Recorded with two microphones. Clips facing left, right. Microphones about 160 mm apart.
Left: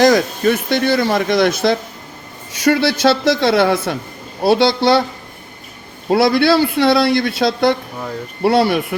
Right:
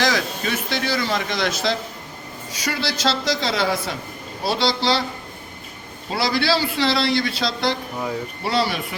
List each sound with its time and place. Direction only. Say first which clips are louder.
0.0 s speech: left 10 dB; 55° left (ahead or behind)
6.1 s speech: left 9 dB; 55° left (ahead or behind)